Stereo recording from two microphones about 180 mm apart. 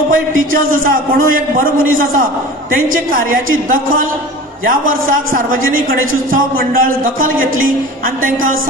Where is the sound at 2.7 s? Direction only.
50° right (ahead or behind).